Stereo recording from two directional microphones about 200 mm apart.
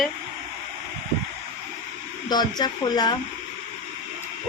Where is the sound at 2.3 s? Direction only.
20° left (ahead or behind).